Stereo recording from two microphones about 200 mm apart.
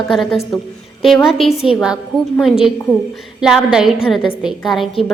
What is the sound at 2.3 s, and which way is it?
A woman's voice, centre (ahead or behind).